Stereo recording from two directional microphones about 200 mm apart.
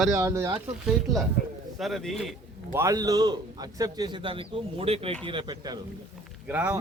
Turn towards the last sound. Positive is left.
turn(degrees=-10)  # may be behind; listen again after turning